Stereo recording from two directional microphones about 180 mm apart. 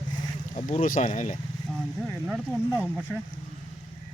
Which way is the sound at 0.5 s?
35° left (ahead or behind).